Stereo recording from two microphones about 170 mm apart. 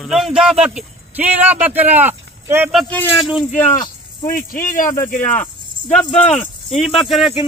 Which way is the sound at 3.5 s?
45° left (ahead or behind).